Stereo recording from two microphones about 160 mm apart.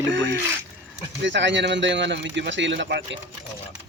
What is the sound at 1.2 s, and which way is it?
A man's voice, 90° right.